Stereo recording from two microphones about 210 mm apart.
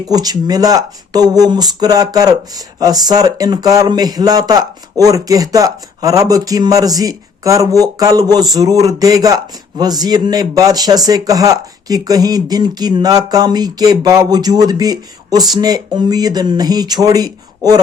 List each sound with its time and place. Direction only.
0.1 s speech: 20° right (ahead or behind)